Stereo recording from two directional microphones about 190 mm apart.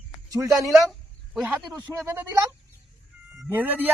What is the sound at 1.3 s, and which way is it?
Speech, centre (ahead or behind).